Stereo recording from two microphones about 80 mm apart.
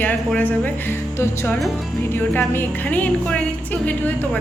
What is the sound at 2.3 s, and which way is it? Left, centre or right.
Music, left.